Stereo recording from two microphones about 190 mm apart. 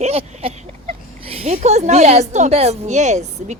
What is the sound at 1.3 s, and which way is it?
Speech, 35° right (ahead or behind).